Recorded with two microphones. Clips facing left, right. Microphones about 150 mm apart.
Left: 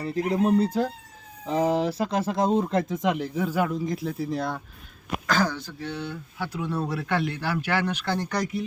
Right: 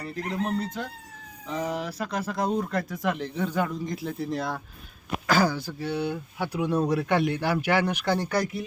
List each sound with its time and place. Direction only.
0.4 s speech: 35° left (ahead or behind); by 8.6 s 5° right (ahead or behind)